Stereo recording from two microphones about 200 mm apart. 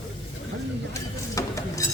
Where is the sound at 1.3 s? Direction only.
15° left (ahead or behind).